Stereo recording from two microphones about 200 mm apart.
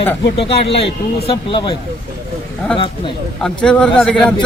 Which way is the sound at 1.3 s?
25° left (ahead or behind).